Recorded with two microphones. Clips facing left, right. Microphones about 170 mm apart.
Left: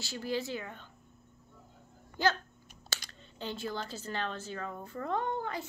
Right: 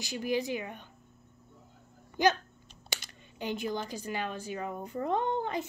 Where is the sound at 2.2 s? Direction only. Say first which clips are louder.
Right 4 dB; 15° right (ahead or behind).